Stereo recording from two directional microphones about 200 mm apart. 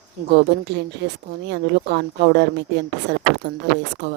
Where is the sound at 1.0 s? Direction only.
60° right (ahead or behind).